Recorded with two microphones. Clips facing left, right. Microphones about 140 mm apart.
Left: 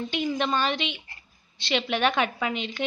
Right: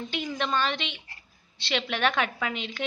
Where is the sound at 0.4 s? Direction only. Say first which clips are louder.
Right 1 dB; 5° left (ahead or behind).